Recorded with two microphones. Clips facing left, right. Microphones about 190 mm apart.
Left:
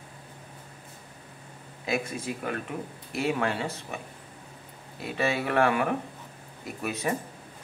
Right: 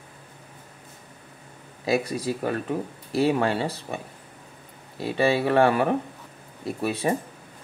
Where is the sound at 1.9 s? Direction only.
35° right (ahead or behind).